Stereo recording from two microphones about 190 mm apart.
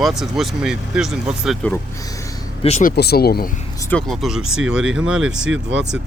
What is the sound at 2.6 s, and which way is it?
Speech, 35° left (ahead or behind).